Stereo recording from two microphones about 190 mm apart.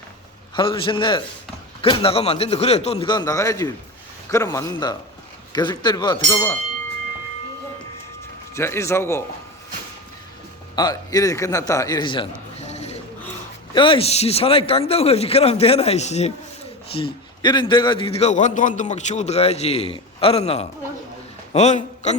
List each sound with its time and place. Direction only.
0.5 s a man's voice: 25° left (ahead or behind)
8.5 s a man's voice: 15° left (ahead or behind)
10.8 s a man's voice: 20° left (ahead or behind)
12.5 s mechanisms: 35° left (ahead or behind)
13.7 s a man's voice: 25° left (ahead or behind)